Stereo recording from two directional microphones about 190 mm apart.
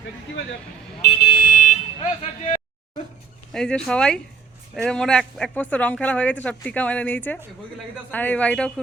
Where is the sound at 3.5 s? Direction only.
5° left (ahead or behind).